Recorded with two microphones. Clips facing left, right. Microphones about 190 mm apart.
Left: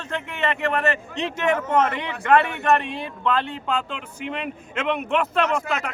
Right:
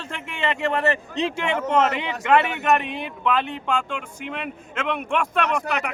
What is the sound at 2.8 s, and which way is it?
Speech, centre (ahead or behind).